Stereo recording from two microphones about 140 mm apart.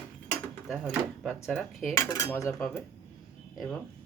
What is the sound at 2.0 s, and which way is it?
Cutlery, 15° left (ahead or behind).